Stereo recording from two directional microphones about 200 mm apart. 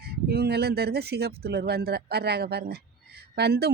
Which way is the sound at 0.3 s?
50° right (ahead or behind).